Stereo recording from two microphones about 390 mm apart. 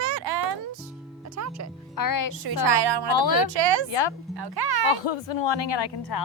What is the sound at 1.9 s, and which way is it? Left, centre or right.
Speech, left.